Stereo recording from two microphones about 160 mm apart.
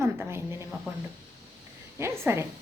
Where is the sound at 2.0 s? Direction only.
15° right (ahead or behind).